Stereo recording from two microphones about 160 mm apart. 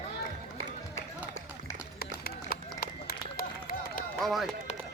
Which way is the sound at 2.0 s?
75° left (ahead or behind).